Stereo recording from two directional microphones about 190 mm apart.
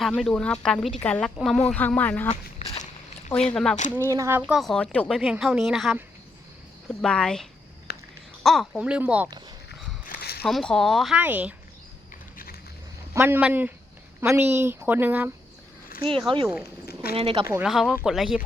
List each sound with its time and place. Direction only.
0.0 s a woman's voice: centre (ahead or behind)
2.3 s a sound: 35° left (ahead or behind)
3.3 s a woman's voice: 5° left (ahead or behind)
4.1 s a woman's voice: 15° right (ahead or behind); by 7.4 s 5° left (ahead or behind)
7.9 s a sound: 55° left (ahead or behind)
8.4 s a woman's voice: centre (ahead or behind)
9.6 s a sound: 55° left (ahead or behind)
10.4 s a woman's voice: 5° left (ahead or behind)
13.1 s speech: 10° right (ahead or behind)
16.0 s speech: 25° right (ahead or behind)
16.9 s a sound: 55° left (ahead or behind)
17.2 s speech: 30° right (ahead or behind)
17.4 s speech: 10° right (ahead or behind)
17.7 s a woman's voice: centre (ahead or behind)